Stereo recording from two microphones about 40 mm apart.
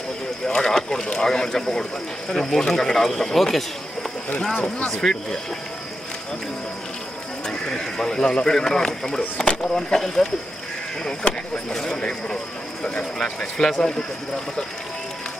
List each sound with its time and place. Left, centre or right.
0.6 s speech: centre
4.9 s speech: centre
7.4 s speech: centre
11.7 s speech: centre